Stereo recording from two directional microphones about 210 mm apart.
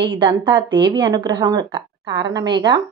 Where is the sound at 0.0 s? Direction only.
25° right (ahead or behind).